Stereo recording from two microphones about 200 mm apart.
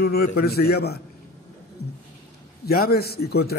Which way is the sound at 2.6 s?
50° left (ahead or behind).